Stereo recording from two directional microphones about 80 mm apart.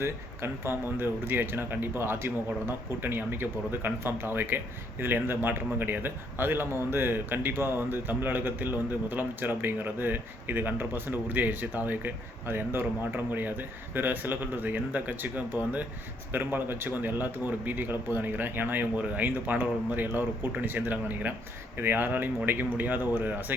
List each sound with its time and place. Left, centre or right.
0.0 s speech: right